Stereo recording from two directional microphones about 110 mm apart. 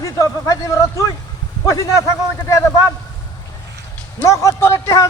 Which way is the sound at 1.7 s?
30° left (ahead or behind).